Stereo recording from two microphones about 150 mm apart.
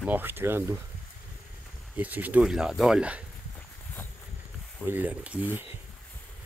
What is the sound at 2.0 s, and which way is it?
Speech, 10° right (ahead or behind).